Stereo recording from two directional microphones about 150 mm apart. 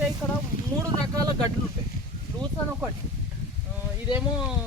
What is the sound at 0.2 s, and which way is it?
Speech, 15° left (ahead or behind).